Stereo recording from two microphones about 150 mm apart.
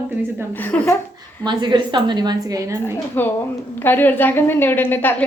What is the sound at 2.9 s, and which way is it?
A woman's voice, 15° left (ahead or behind).